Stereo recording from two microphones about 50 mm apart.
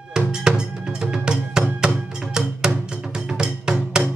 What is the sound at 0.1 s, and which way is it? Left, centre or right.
Music, centre.